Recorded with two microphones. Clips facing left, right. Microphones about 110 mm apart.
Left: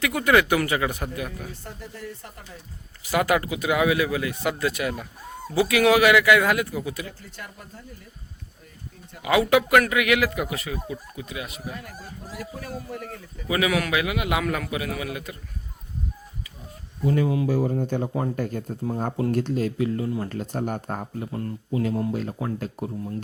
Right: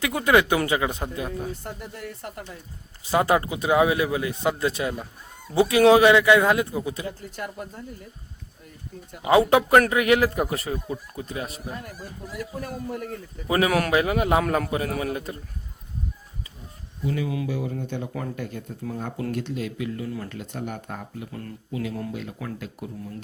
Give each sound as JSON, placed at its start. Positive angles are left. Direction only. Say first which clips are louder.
{"t": 0.0, "sound": "speech", "louder": "even", "side_deg": -20}
{"t": 3.1, "sound": "speech", "louder": "right 1 dB", "side_deg": -25}
{"t": 7.2, "sound": "speech", "louder": "right 7 dB", "side_deg": -45}
{"t": 9.2, "sound": "a man's voice", "louder": "right 2 dB", "side_deg": -30}
{"t": 17.1, "sound": "speech", "louder": "left 5 dB", "side_deg": 35}